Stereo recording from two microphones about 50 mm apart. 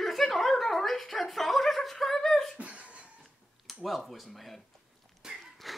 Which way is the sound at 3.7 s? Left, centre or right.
Centre.